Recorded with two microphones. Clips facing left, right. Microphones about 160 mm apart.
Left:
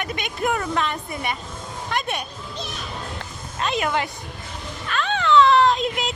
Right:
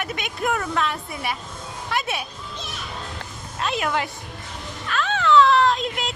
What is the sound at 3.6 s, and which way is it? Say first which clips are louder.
Speech: left 1 dB; centre (ahead or behind).